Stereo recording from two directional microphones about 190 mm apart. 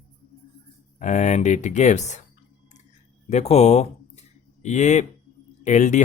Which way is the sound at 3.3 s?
35° left (ahead or behind).